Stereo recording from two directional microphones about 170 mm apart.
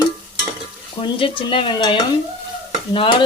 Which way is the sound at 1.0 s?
30° left (ahead or behind).